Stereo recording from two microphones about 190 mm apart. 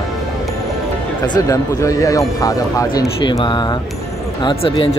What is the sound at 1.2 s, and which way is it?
Speech, 20° left (ahead or behind).